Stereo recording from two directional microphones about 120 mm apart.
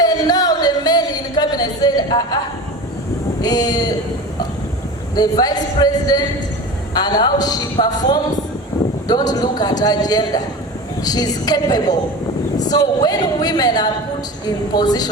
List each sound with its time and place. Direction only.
0.0 s music: 30° left (ahead or behind)
3.4 s a woman's voice: 35° left (ahead or behind)
5.1 s a woman's voice: 35° left (ahead or behind)